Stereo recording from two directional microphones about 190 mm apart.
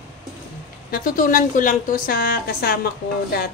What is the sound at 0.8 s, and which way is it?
A woman's voice, 50° left (ahead or behind).